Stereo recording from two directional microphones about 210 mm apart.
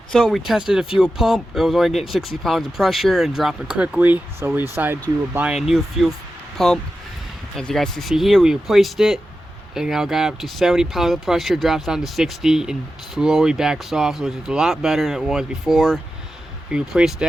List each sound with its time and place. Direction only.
0.1 s speech: centre (ahead or behind)